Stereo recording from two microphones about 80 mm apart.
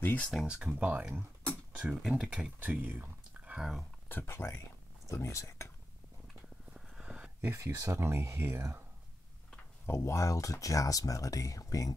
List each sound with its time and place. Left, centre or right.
0.3 s speech: centre
1.5 s a sound: centre
2.0 s speech: centre
3.5 s speech: centre
4.1 s speech: left
6.7 s vehicle: centre
7.4 s speech: right
9.8 s speech: left